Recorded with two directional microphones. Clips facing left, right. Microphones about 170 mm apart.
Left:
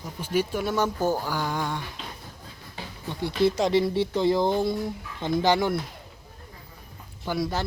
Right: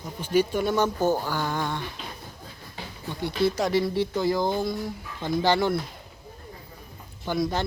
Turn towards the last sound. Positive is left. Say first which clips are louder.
# right 2 dB
turn(degrees=5)  # may be behind; listen again after turning